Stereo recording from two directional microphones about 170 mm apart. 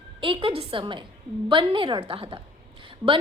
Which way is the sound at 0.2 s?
30° right (ahead or behind).